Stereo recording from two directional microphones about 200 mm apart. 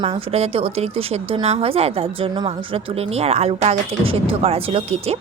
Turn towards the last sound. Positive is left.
turn(degrees=-30)  # may be behind; listen again after turning